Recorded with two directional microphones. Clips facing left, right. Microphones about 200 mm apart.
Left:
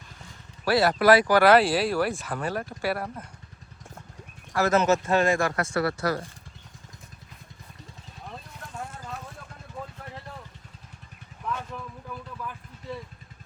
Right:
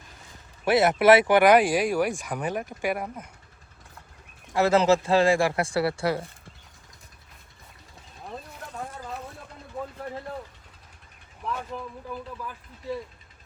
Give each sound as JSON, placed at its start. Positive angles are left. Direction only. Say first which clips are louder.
{"t": 0.6, "sound": "speech", "louder": "right 2 dB", "side_deg": -20}
{"t": 4.5, "sound": "speech", "louder": "right 2 dB", "side_deg": -30}